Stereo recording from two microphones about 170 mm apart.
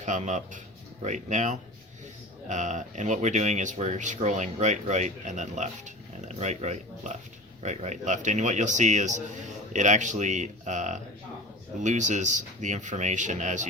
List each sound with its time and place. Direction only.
0.0 s speech: 45° right (ahead or behind)